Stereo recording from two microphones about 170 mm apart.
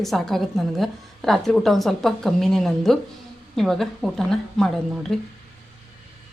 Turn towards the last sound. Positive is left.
turn(degrees=0)  # may be behind; listen again after turning